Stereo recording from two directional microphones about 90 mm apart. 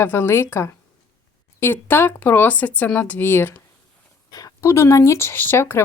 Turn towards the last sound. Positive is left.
turn(degrees=25)  # may be behind; listen again after turning